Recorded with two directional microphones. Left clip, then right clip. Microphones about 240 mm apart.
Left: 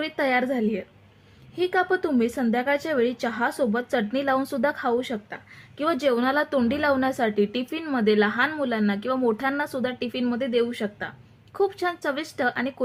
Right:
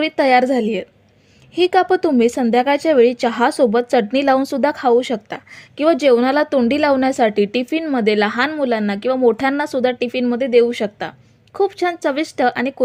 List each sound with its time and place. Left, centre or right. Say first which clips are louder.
0.0 s a woman's voice: right 10 dB; right